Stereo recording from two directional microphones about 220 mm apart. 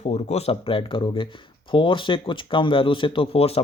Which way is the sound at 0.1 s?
30° left (ahead or behind).